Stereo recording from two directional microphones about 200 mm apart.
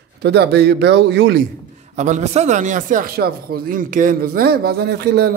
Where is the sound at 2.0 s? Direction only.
35° right (ahead or behind).